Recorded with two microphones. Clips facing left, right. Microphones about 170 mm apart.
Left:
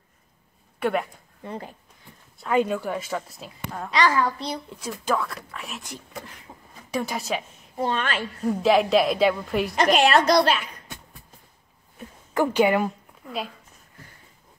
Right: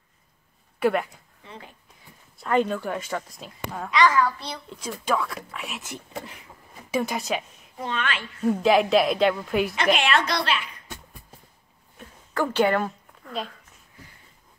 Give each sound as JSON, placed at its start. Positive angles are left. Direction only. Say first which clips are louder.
{"t": 0.7, "sound": "speech", "louder": "right 2 dB", "side_deg": 0}
{"t": 1.4, "sound": "speech", "louder": "left 9 dB", "side_deg": 45}
{"t": 2.4, "sound": "a woman's voice", "louder": "even", "side_deg": 10}
{"t": 3.9, "sound": "a woman's voice", "louder": "right 1 dB", "side_deg": 30}
{"t": 4.4, "sound": "a child's voice", "louder": "left 5 dB", "side_deg": 10}
{"t": 5.1, "sound": "a woman's voice", "louder": "even", "side_deg": -5}
{"t": 7.7, "sound": "a woman's voice", "louder": "left 4 dB", "side_deg": 35}
{"t": 8.5, "sound": "a woman's voice", "louder": "even", "side_deg": 0}
{"t": 9.8, "sound": "a woman's voice", "louder": "left 7 dB", "side_deg": 40}
{"t": 12.4, "sound": "a woman's voice", "louder": "left 2 dB", "side_deg": 10}